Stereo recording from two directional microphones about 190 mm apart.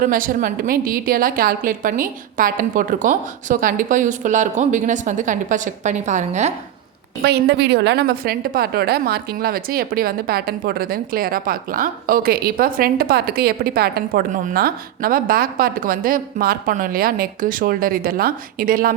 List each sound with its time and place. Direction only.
0.0 s a woman's voice: 45° right (ahead or behind)
7.2 s a woman's voice: 60° right (ahead or behind)